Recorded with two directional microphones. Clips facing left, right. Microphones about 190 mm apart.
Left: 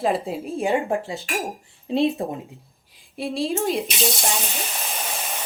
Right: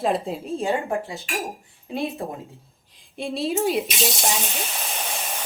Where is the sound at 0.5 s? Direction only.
15° left (ahead or behind).